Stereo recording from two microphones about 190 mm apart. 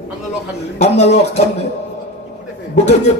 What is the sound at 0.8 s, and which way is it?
Speech, 35° left (ahead or behind).